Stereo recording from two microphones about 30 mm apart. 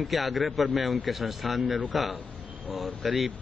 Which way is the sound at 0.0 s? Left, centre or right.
Centre.